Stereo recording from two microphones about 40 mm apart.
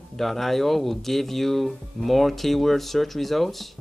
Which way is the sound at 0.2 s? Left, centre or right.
Centre.